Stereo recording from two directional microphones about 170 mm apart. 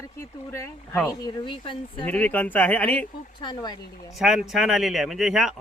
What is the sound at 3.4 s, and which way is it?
Speech, 25° left (ahead or behind).